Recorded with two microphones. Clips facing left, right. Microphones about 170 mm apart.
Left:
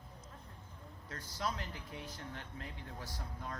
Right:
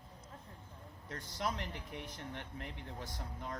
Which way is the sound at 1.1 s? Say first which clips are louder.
Right 1 dB; 20° right (ahead or behind).